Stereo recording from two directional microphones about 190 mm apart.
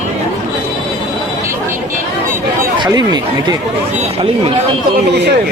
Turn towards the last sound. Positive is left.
turn(degrees=-20)  # may be behind; listen again after turning